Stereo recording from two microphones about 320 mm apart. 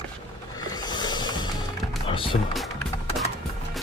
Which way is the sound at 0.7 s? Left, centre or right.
Centre.